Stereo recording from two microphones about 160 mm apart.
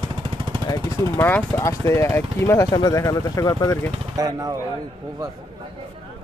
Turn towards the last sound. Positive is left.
turn(degrees=-20)  # may be behind; listen again after turning